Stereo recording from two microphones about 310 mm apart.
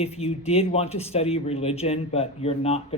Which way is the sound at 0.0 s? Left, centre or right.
Centre.